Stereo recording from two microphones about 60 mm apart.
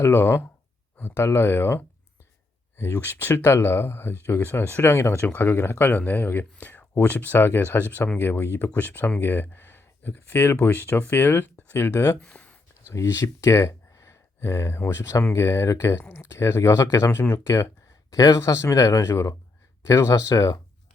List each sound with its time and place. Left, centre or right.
0.0 s speech: left
2.9 s speech: left
5.2 s speech: left
12.2 s a sound: centre
12.9 s speech: left
17.1 s speech: left
17.3 s speech: left
18.1 s speech: left
18.3 s speech: left